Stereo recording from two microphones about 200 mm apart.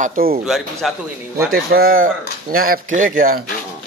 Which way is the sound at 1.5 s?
50° right (ahead or behind).